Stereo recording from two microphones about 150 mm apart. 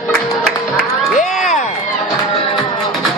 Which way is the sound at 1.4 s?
50° left (ahead or behind).